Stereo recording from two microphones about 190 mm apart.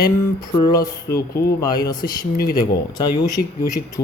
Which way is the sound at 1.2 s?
55° left (ahead or behind).